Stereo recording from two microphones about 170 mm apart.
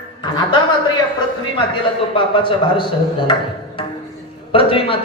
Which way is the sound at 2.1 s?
30° left (ahead or behind).